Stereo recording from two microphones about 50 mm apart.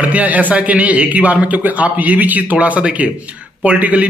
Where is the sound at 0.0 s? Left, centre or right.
Right.